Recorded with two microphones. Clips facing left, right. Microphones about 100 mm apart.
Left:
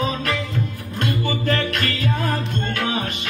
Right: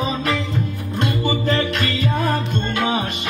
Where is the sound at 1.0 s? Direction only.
15° right (ahead or behind).